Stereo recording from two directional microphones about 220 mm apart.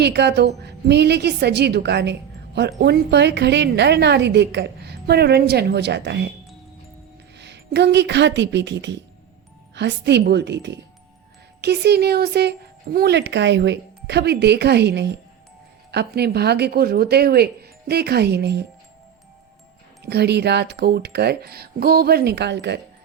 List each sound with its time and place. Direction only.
0.0 s a woman's voice: 50° right (ahead or behind)
7.3 s a woman's voice: 50° right (ahead or behind)
20.1 s a woman's voice: 50° right (ahead or behind)